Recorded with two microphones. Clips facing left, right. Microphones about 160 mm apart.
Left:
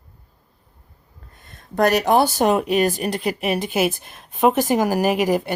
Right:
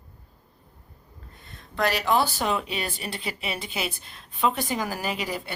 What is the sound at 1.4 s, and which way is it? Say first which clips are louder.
Speech: left 8 dB; 45° left (ahead or behind).